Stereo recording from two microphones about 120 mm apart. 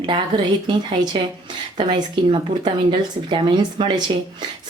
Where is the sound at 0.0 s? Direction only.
40° right (ahead or behind).